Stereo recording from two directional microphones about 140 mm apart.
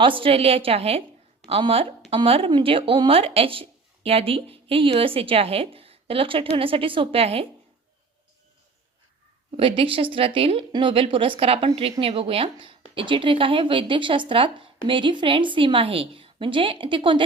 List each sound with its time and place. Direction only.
0.0 s a woman's voice: 40° right (ahead or behind)
9.6 s speech: 40° right (ahead or behind)